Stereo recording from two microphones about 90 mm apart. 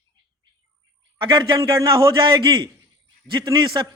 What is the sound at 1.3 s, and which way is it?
A man's voice, 55° right (ahead or behind).